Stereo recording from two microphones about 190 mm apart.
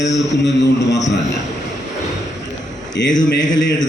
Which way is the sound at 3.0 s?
60° left (ahead or behind).